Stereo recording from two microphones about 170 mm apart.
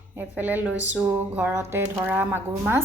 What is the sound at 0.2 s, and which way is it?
A woman's voice, 10° right (ahead or behind).